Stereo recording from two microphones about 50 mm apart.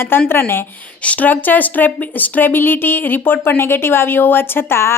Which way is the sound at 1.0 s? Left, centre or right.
Left.